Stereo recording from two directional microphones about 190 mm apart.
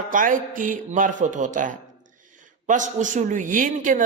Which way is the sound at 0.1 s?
45° right (ahead or behind).